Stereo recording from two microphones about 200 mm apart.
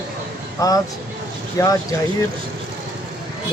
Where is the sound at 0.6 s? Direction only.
15° left (ahead or behind).